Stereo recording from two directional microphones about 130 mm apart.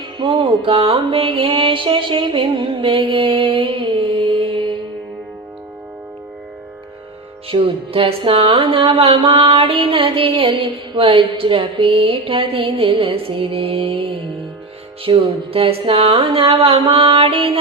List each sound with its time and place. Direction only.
0.2 s music: 40° right (ahead or behind)
7.5 s music: 40° right (ahead or behind)